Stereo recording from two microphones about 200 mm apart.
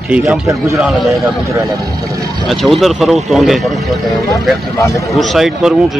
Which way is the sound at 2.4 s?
Centre (ahead or behind).